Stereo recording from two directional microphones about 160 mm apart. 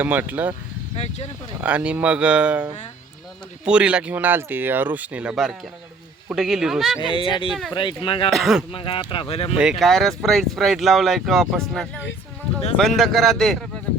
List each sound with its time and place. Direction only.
0.0 s speech: 10° right (ahead or behind)
0.9 s speech: 40° left (ahead or behind)
1.6 s speech: 5° right (ahead or behind)
3.7 s speech: 5° right (ahead or behind)
7.0 s speech: 30° left (ahead or behind)
8.3 s speech: centre (ahead or behind)
8.7 s speech: 30° left (ahead or behind)
9.6 s speech: centre (ahead or behind)
13.0 s speech: centre (ahead or behind)